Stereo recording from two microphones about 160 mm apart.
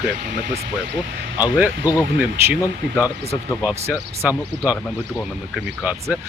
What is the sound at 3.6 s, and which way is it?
Speech, 10° right (ahead or behind).